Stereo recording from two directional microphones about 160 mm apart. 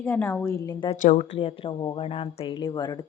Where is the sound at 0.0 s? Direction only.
15° left (ahead or behind).